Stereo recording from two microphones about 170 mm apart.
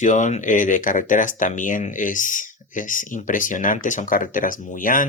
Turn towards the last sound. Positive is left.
turn(degrees=55)  # may be behind; listen again after turning